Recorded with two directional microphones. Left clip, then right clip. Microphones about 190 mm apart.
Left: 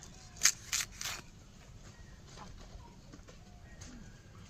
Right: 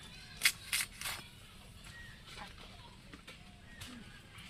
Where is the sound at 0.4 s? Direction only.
25° left (ahead or behind).